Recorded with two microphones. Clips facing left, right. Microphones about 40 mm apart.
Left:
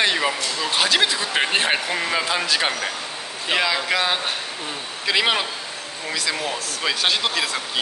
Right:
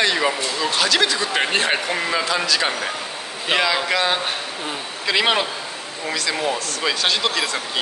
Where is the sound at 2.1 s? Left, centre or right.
Centre.